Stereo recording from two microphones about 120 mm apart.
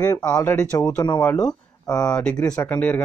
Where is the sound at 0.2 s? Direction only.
15° left (ahead or behind).